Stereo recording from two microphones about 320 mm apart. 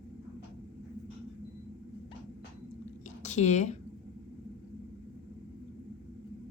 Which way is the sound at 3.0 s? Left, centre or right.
Left.